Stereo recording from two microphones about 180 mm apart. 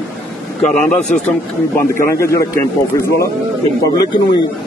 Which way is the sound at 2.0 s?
15° left (ahead or behind).